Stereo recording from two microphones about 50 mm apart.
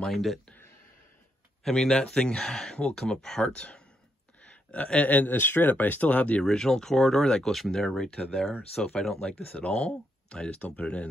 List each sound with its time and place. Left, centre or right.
0.0 s speech: centre
1.6 s speech: centre; by 6.4 s left
6.4 s speech: centre
8.7 s speech: left